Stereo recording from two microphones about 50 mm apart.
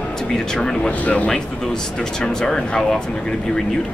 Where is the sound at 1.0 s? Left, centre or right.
Left.